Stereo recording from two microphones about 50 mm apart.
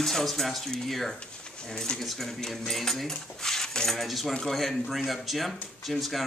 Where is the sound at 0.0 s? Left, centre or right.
Centre.